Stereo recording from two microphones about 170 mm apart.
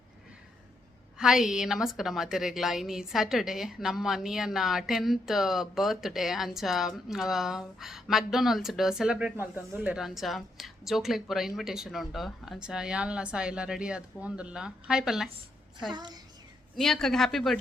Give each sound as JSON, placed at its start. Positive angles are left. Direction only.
{"t": 1.2, "sound": "a woman's voice", "side_deg": -5}
{"t": 15.9, "sound": "a woman's voice", "side_deg": -25}
{"t": 16.7, "sound": "a woman's voice", "side_deg": 0}